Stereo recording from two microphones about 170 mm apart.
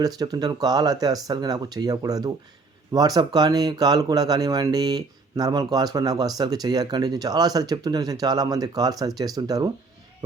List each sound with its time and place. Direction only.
0.0 s speech: 20° right (ahead or behind)